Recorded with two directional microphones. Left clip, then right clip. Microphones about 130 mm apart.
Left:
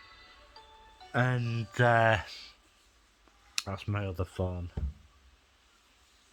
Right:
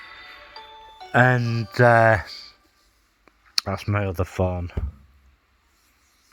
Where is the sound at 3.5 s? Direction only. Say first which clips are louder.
Right 11 dB; 65° right (ahead or behind); by 4.7 s 90° right.